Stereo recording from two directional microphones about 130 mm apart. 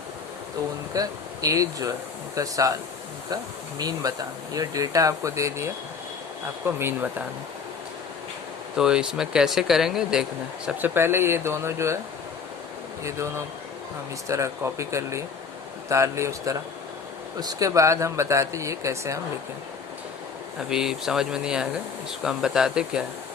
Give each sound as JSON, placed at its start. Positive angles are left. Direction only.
{"t": 0.9, "sound": "speech", "side_deg": -25}
{"t": 3.8, "sound": "speech", "side_deg": -30}
{"t": 6.7, "sound": "speech", "side_deg": -15}
{"t": 8.8, "sound": "speech", "side_deg": -5}
{"t": 13.1, "sound": "speech", "side_deg": -20}
{"t": 20.7, "sound": "speech", "side_deg": -5}